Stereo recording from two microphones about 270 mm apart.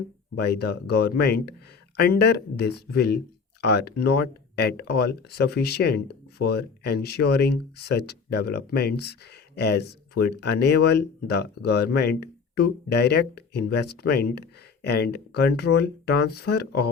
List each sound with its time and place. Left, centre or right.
0.3 s speech: left